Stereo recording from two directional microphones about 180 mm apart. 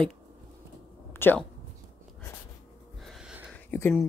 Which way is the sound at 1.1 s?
10° left (ahead or behind).